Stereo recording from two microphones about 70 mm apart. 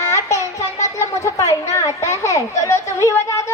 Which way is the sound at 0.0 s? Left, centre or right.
Left.